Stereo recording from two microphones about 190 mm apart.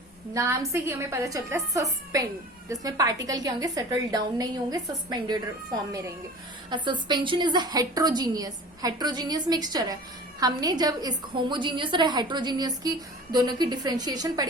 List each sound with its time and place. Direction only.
0.3 s a woman's voice: 15° right (ahead or behind)
6.7 s a woman's voice: 25° right (ahead or behind)